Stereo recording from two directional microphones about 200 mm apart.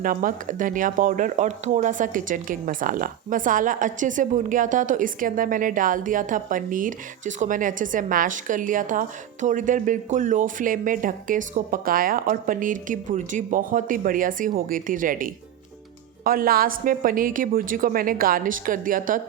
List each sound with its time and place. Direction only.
0.0 s a woman's voice: 45° right (ahead or behind)